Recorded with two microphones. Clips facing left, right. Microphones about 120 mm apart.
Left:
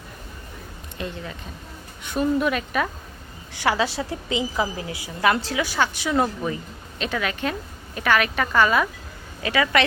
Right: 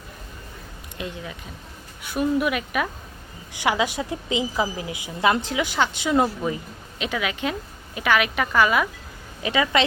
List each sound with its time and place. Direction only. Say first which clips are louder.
0.9 s a woman's voice: left 1 dB; 15° right (ahead or behind)
9.4 s a woman's voice: even; 20° right (ahead or behind)